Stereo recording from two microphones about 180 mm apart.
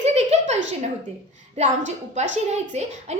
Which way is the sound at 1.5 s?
40° right (ahead or behind).